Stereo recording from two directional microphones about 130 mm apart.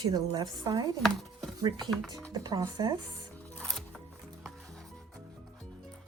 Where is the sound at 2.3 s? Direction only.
30° right (ahead or behind).